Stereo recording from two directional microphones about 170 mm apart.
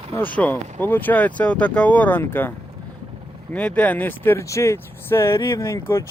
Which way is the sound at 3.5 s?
10° left (ahead or behind).